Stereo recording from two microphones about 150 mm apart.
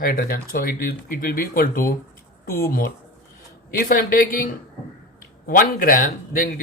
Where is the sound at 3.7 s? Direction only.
65° left (ahead or behind).